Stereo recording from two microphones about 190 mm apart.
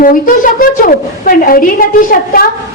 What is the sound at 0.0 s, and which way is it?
A woman's voice, 45° left (ahead or behind).